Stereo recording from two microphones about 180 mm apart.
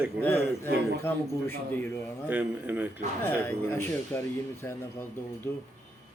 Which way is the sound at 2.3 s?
10° right (ahead or behind).